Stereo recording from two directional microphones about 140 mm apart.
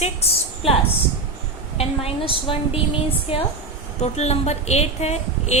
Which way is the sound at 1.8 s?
40° left (ahead or behind).